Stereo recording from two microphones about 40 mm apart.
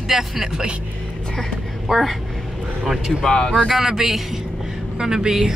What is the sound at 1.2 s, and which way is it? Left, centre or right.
Speech, centre.